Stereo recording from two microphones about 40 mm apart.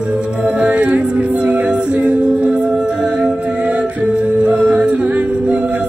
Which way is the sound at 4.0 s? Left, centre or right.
Right.